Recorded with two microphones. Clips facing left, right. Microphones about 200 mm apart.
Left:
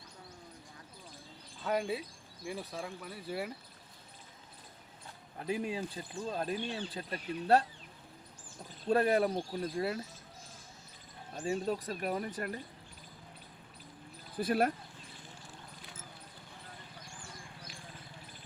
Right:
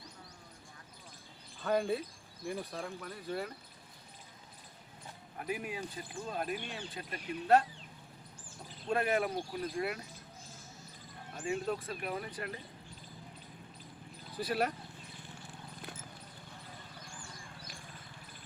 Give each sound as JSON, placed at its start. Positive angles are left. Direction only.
{"t": 1.6, "sound": "speech", "side_deg": 5}
{"t": 5.4, "sound": "speech", "side_deg": 30}
{"t": 8.9, "sound": "speech", "side_deg": 35}
{"t": 11.3, "sound": "speech", "side_deg": 35}
{"t": 14.3, "sound": "speech", "side_deg": 50}